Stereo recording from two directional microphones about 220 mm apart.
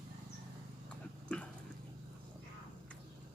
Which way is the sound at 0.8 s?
5° left (ahead or behind).